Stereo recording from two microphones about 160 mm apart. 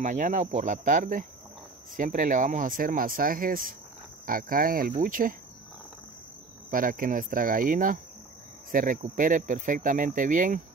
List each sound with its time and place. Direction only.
0.0 s speech: 50° right (ahead or behind)
6.7 s speech: 60° right (ahead or behind)